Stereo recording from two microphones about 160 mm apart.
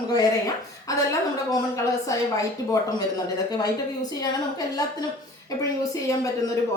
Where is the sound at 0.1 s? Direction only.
20° left (ahead or behind).